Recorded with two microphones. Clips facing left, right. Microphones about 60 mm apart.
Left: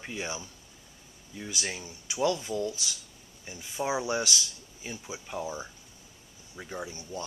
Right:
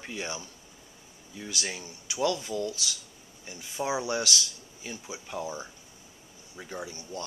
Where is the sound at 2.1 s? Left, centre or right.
Left.